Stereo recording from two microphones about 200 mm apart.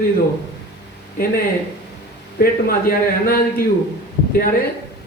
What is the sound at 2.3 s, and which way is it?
A man's voice, 45° left (ahead or behind).